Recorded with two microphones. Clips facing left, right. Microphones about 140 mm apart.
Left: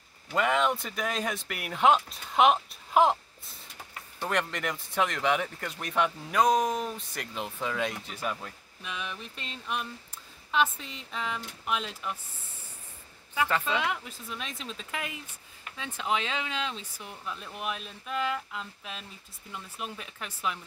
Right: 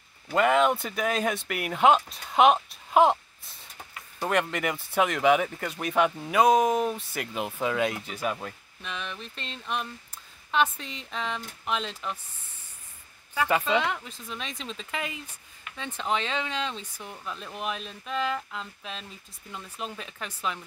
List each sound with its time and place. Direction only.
0.3 s speech: centre (ahead or behind)
4.2 s speech: 5° right (ahead or behind)
8.8 s a sound: 10° left (ahead or behind)
10.5 s speech: 5° left (ahead or behind)
13.5 s speech: 10° right (ahead or behind)
13.7 s speech: 5° left (ahead or behind)